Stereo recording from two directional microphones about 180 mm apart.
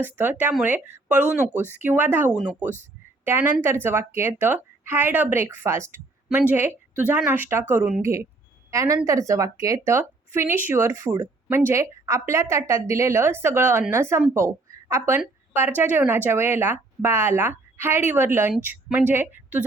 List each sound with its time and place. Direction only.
0.0 s a woman's voice: 10° right (ahead or behind)